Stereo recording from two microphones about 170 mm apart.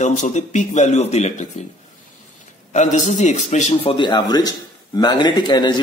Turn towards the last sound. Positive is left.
turn(degrees=25)  # may be behind; listen again after turning